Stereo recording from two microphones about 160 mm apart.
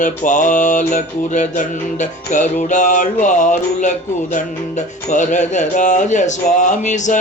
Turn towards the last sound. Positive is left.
turn(degrees=50)  # may be behind; listen again after turning